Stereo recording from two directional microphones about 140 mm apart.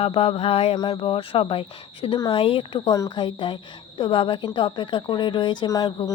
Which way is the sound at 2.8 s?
25° left (ahead or behind).